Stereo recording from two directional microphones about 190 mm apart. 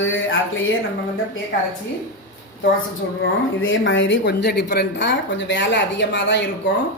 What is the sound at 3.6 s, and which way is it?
A woman's voice, 90° left.